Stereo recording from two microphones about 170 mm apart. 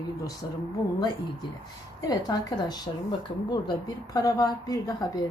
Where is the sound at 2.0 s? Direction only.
20° left (ahead or behind).